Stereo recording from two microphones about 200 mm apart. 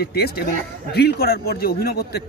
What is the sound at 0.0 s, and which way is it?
Speech, 55° left (ahead or behind).